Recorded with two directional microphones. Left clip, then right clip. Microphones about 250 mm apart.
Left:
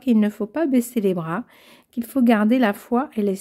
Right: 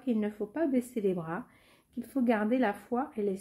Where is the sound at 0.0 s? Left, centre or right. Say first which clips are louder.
Left 11 dB; left.